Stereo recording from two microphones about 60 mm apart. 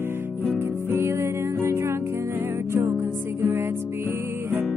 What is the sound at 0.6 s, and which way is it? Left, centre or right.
Music, right.